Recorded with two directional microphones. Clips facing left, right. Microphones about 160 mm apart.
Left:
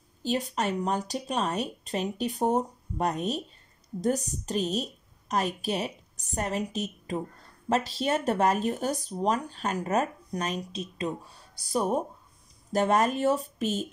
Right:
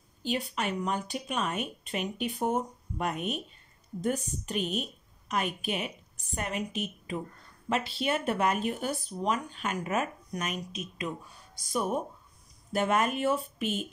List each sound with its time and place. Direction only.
0.2 s a woman's voice: 40° left (ahead or behind)
4.5 s a woman's voice: 35° left (ahead or behind)